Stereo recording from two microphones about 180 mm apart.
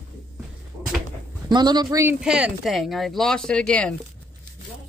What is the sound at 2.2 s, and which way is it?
Speech, 5° right (ahead or behind).